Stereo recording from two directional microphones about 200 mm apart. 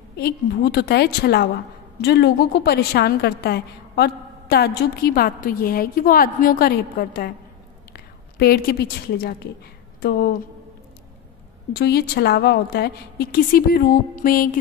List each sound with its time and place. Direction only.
0.2 s a woman's voice: 50° left (ahead or behind)
11.7 s a woman's voice: 55° left (ahead or behind)